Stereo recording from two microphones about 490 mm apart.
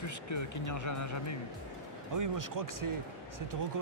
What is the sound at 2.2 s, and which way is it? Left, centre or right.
Speech, right.